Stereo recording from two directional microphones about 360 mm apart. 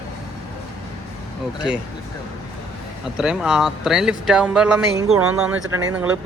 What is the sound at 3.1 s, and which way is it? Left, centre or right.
Speech, centre.